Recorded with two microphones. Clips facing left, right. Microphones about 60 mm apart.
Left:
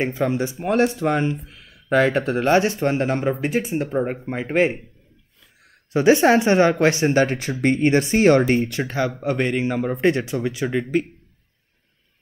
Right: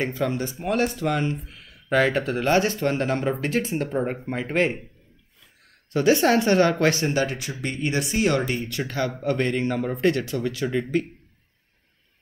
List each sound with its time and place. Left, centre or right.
0.0 s a man's voice: left
5.9 s speech: left
7.2 s speech: left
8.6 s speech: left